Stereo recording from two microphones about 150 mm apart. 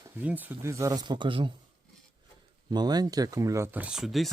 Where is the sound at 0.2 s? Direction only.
10° right (ahead or behind); by 1.5 s 35° right (ahead or behind).